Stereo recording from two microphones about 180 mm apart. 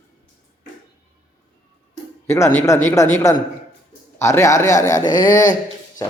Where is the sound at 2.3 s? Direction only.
15° left (ahead or behind).